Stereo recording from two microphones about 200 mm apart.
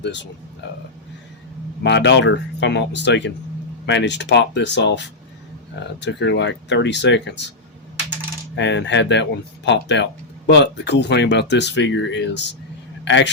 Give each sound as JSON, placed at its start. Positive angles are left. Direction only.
{"t": 0.0, "sound": "speech", "side_deg": 60}
{"t": 1.8, "sound": "speech", "side_deg": 60}
{"t": 8.5, "sound": "a man's voice", "side_deg": 65}